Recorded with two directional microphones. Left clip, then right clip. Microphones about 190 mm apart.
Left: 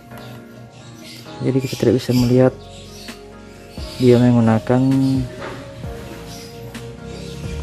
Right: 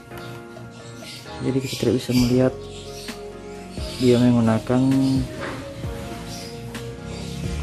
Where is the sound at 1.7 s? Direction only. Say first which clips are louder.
Left 4 dB; 25° left (ahead or behind).